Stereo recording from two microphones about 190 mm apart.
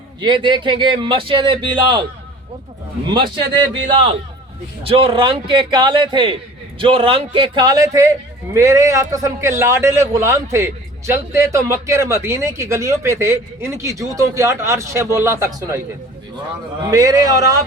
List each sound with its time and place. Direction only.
0.2 s a man's voice: 25° right (ahead or behind)
3.1 s a man's voice: 25° right (ahead or behind)
16.9 s a man's voice: 20° right (ahead or behind)